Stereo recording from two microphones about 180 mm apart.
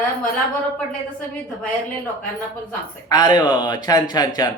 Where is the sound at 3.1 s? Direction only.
25° left (ahead or behind).